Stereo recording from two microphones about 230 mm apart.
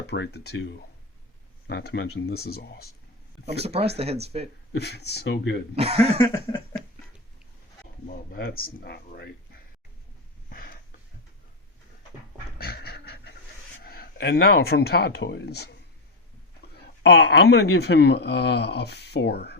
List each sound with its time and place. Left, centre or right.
0.1 s speech: left
3.6 s speech: right
4.8 s speech: left
5.7 s speech: right
6.2 s a sound: centre
8.0 s speech: left
10.5 s a sound: left
12.5 s pant: left
13.8 s speech: left
17.0 s speech: left